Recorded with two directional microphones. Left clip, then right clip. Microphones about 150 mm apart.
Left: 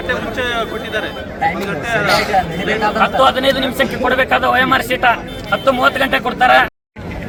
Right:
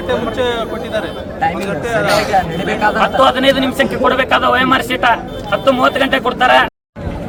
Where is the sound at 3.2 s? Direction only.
5° right (ahead or behind).